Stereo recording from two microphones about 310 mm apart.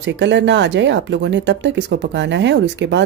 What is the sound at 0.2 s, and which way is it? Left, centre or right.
Speech, right.